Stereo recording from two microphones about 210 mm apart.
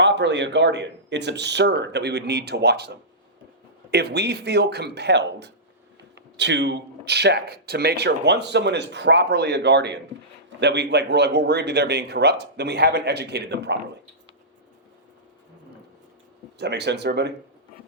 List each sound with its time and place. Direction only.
0.0 s speech: 55° right (ahead or behind)
16.6 s speech: 55° right (ahead or behind)